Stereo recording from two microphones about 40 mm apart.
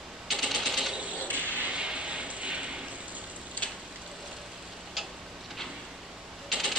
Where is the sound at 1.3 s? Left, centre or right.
Right.